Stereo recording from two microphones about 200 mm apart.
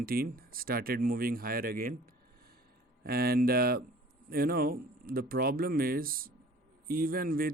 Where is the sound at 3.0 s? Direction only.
50° right (ahead or behind).